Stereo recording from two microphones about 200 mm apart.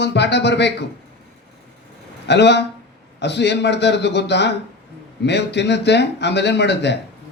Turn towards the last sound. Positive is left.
turn(degrees=60)  # may be behind; listen again after turning